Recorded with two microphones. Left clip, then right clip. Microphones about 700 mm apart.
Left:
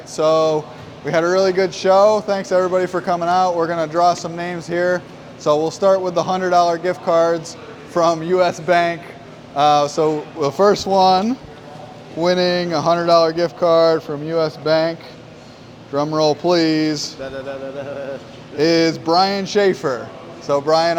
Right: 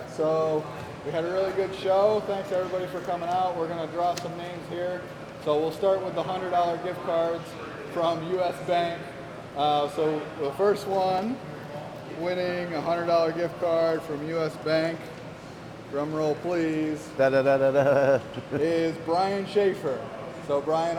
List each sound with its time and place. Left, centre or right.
0.2 s speech: left
1.1 s speech: left
12.2 s speech: left
16.0 s speech: left
17.2 s speech: right
18.6 s speech: left